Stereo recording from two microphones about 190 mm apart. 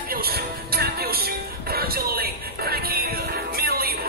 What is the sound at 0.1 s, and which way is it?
Music, 55° right (ahead or behind).